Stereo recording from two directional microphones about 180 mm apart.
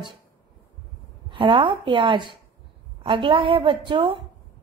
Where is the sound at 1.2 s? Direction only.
25° right (ahead or behind).